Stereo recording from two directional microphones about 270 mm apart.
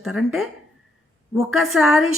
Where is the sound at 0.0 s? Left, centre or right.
Centre.